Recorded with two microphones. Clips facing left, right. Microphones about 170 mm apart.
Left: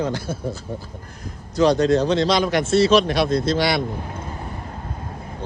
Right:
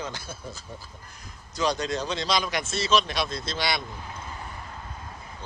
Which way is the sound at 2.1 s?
10° right (ahead or behind).